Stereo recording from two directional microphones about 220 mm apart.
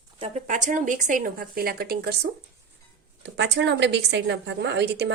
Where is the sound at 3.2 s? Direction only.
50° right (ahead or behind).